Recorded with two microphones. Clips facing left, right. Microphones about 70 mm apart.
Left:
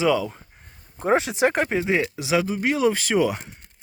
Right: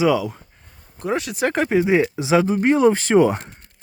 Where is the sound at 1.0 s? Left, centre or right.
Left.